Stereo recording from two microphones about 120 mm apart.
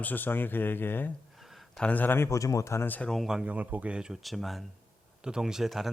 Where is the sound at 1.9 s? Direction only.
15° left (ahead or behind).